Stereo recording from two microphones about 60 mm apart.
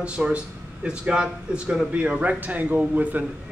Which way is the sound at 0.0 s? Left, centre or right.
Centre.